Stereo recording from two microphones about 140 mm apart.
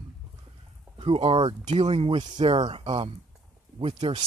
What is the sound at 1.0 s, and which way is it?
Speech, 40° right (ahead or behind).